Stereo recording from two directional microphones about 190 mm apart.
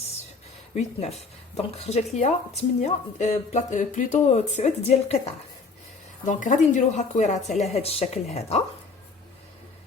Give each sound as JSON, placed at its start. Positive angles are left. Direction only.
{"t": 0.7, "sound": "a woman's voice", "side_deg": 35}
{"t": 6.2, "sound": "a woman's voice", "side_deg": 45}